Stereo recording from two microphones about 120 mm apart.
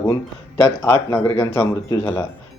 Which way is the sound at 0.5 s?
20° left (ahead or behind).